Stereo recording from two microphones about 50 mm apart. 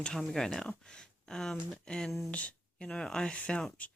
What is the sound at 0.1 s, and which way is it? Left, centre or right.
Speech, centre.